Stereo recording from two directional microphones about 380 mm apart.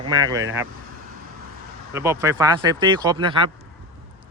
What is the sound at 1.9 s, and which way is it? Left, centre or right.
Speech, centre.